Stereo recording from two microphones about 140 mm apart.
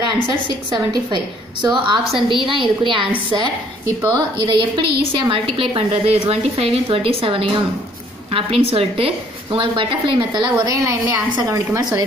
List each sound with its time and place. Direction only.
0.7 s a woman's voice: 35° right (ahead or behind)
10.7 s a woman's voice: 20° right (ahead or behind)